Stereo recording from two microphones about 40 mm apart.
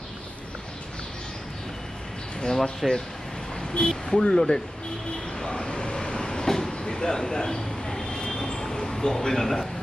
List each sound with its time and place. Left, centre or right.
2.4 s speech: centre
3.8 s speech: left
5.4 s vehicle: centre